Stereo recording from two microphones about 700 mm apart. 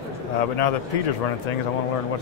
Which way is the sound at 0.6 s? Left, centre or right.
Left.